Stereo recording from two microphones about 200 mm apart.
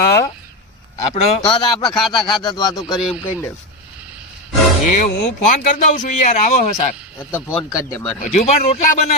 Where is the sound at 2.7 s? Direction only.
Centre (ahead or behind).